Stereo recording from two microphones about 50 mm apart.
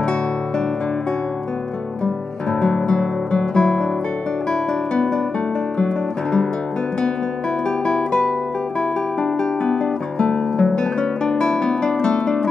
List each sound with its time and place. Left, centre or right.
2.6 s guitar: centre
4.5 s music: centre
7.8 s music: centre